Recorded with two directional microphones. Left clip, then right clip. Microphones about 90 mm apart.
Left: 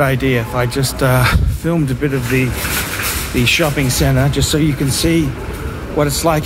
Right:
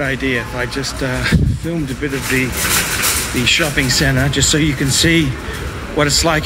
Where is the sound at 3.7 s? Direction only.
25° left (ahead or behind).